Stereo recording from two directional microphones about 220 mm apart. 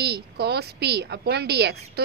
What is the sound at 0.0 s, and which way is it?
A woman's voice, 50° right (ahead or behind).